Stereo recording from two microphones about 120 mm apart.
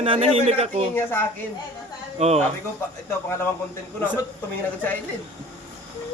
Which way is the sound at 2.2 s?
65° right (ahead or behind).